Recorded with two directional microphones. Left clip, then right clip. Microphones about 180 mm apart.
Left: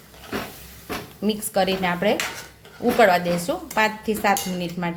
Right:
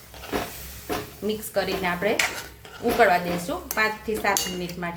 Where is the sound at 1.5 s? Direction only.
50° left (ahead or behind).